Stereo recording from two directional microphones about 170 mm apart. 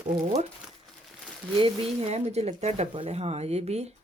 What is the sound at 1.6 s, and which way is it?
Speech, 35° right (ahead or behind).